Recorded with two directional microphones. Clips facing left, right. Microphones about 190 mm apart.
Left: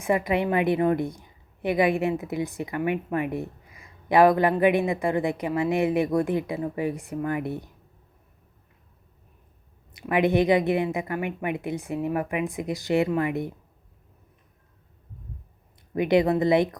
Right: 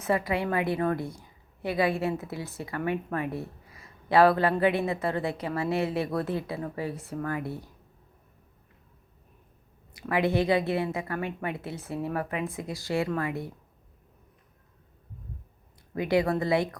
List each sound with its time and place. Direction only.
0.0 s a woman's voice: 20° left (ahead or behind)
9.9 s a woman's voice: 20° left (ahead or behind)
16.0 s speech: 20° left (ahead or behind)